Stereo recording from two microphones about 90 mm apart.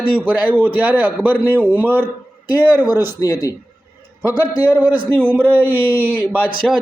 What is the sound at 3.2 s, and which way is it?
Speech, 45° left (ahead or behind).